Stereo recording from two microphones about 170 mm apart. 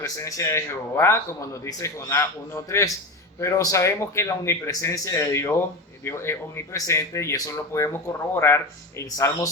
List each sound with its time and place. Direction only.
0.0 s speech: 20° left (ahead or behind)